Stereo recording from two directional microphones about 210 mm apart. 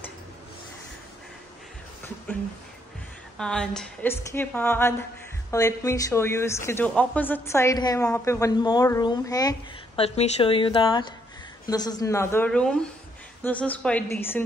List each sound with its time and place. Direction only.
3.3 s a woman's voice: 5° left (ahead or behind)
10.0 s a woman's voice: 30° left (ahead or behind); by 14.4 s 10° left (ahead or behind)